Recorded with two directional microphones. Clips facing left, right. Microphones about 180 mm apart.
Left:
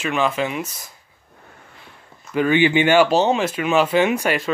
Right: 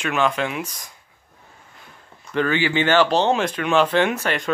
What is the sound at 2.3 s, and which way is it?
Speech, 15° left (ahead or behind).